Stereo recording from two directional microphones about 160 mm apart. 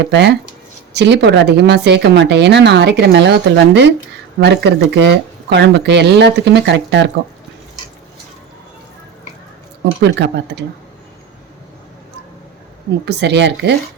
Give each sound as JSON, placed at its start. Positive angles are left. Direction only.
{"t": 0.0, "sound": "speech", "side_deg": -90}
{"t": 10.0, "sound": "speech", "side_deg": -90}
{"t": 13.1, "sound": "speech", "side_deg": -90}